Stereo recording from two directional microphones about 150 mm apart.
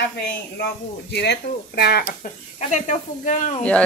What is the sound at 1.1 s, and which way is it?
Speech, 90° left.